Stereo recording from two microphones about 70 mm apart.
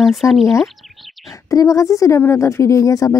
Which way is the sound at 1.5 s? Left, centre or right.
Left.